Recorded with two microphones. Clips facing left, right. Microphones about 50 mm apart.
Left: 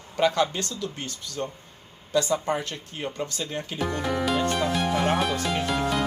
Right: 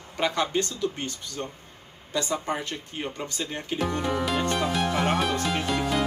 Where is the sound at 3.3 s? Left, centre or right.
Centre.